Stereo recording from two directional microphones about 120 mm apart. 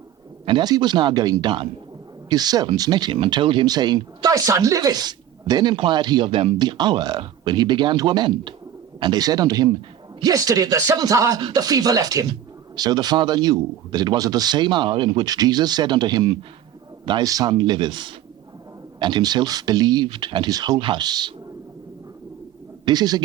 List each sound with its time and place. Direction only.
0.4 s speech: 35° right (ahead or behind)
22.9 s speech: 35° right (ahead or behind)